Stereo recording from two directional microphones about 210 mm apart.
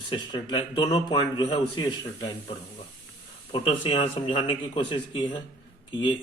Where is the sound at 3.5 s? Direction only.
25° left (ahead or behind).